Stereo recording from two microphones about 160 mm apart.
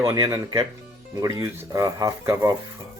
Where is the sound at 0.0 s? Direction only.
20° right (ahead or behind).